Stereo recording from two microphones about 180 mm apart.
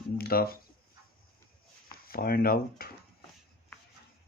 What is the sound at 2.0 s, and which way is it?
Speech, 55° left (ahead or behind).